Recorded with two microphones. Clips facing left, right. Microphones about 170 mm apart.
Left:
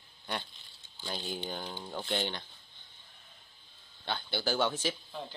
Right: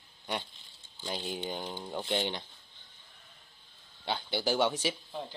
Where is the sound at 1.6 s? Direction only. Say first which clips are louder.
Right 2 dB; 15° right (ahead or behind).